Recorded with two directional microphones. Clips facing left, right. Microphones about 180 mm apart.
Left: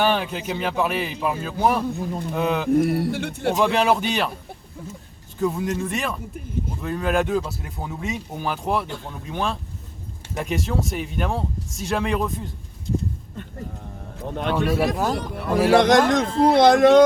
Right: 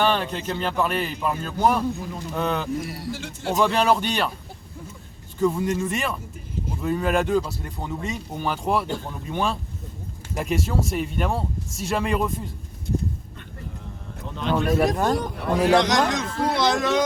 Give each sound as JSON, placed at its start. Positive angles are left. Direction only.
{"t": 0.0, "sound": "speech", "side_deg": 5}
{"t": 2.6, "sound": "speech", "side_deg": 55}
{"t": 3.6, "sound": "speech", "side_deg": 0}
{"t": 5.4, "sound": "speech", "side_deg": 0}
{"t": 14.3, "sound": "speech", "side_deg": 55}
{"t": 14.7, "sound": "speech", "side_deg": 5}
{"t": 15.7, "sound": "speech", "side_deg": 55}